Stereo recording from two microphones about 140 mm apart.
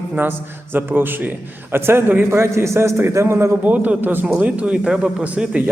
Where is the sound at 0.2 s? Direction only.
15° right (ahead or behind).